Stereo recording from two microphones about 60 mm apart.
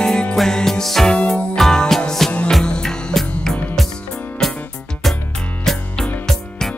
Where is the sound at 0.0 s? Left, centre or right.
Centre.